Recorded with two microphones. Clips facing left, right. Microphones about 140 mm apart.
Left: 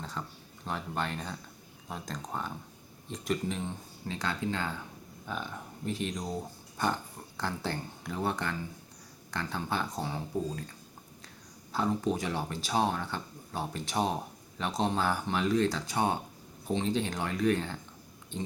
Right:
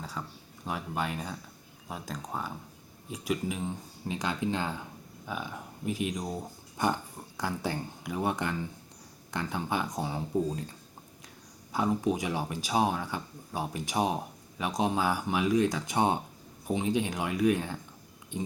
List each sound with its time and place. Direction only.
0.0 s speech: 5° right (ahead or behind)
11.7 s speech: 15° right (ahead or behind)